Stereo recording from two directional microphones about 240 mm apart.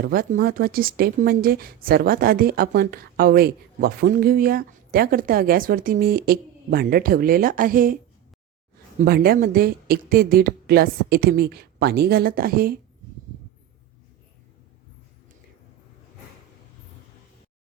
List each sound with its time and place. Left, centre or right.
0.0 s speech: right
9.0 s speech: right